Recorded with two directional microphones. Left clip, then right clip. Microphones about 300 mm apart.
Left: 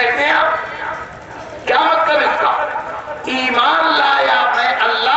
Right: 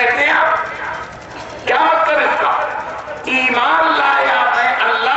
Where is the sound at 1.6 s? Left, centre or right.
Centre.